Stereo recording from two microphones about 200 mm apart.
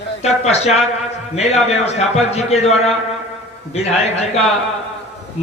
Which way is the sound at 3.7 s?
30° left (ahead or behind).